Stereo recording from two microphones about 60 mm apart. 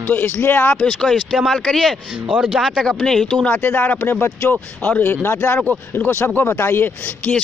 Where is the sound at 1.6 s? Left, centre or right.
Centre.